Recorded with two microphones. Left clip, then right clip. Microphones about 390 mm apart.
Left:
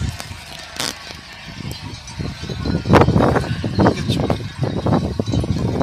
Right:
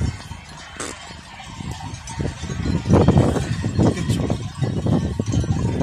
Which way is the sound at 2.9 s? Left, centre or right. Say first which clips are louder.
Left 5 dB; left.